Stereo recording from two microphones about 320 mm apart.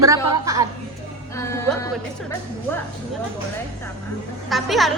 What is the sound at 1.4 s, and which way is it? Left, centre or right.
Speech, centre.